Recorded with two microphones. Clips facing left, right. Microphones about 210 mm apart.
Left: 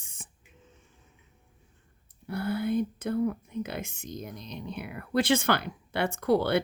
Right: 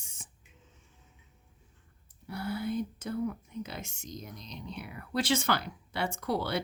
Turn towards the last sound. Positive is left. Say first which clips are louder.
# left 7 dB
turn(degrees=55)  # may be behind; listen again after turning